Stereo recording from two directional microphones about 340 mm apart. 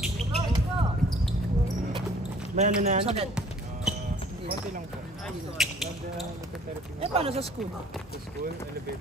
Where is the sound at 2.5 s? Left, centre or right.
Right.